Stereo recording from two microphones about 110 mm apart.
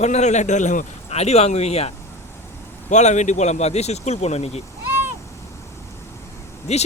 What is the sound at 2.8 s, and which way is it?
Speech, 90° left.